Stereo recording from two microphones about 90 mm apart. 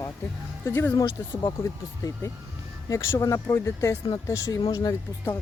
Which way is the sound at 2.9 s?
35° left (ahead or behind).